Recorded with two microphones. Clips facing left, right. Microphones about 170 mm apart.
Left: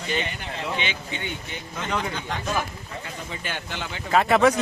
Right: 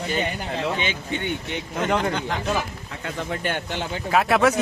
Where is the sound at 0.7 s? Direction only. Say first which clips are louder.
Right 3 dB; 45° right (ahead or behind).